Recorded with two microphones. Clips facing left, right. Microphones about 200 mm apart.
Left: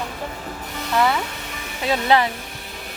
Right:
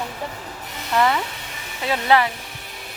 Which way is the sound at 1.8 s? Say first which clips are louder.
Even; 20° left (ahead or behind).